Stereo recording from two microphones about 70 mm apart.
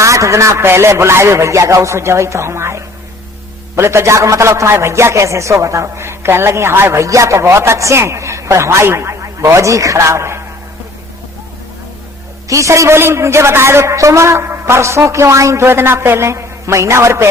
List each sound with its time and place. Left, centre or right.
0.0 s a man's voice: right
7.0 s a man's voice: right
12.5 s a man's voice: right
15.6 s a man's voice: right